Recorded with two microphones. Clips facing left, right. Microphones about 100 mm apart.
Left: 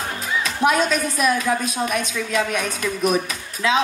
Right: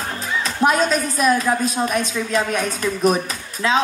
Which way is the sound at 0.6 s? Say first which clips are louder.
Right 2 dB; 35° right (ahead or behind).